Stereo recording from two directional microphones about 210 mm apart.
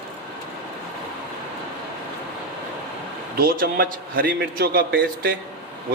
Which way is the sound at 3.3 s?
45° right (ahead or behind).